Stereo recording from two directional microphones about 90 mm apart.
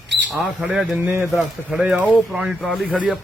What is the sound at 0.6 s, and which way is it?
Speech, centre (ahead or behind).